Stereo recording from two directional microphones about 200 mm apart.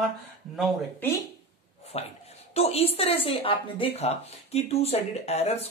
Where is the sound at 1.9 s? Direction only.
30° left (ahead or behind).